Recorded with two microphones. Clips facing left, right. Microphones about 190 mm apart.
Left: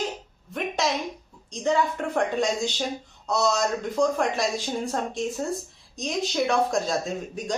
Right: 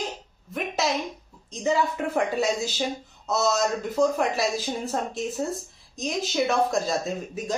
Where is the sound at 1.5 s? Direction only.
5° right (ahead or behind).